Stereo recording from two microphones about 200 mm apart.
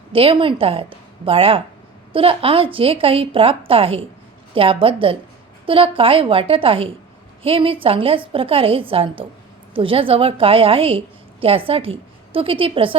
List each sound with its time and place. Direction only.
0.1 s a woman's voice: 25° right (ahead or behind)